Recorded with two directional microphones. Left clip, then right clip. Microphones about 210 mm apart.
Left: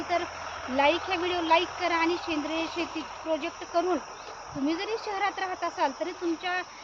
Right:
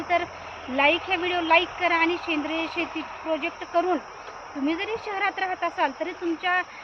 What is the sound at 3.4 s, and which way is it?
Speech, 5° left (ahead or behind).